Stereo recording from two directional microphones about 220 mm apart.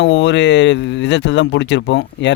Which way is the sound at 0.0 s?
55° left (ahead or behind).